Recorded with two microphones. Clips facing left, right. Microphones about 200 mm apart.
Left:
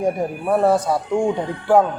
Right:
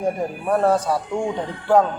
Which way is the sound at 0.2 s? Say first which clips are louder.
Left 2 dB; 10° left (ahead or behind).